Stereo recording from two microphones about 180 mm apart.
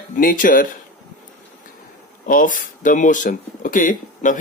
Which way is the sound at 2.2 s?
50° left (ahead or behind).